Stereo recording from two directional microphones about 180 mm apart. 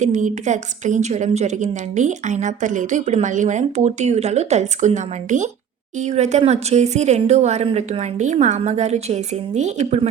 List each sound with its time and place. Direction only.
0.0 s a woman's voice: 45° right (ahead or behind)